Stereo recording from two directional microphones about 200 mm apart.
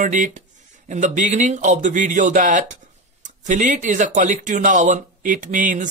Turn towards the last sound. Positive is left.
turn(degrees=-40)  # may be behind; listen again after turning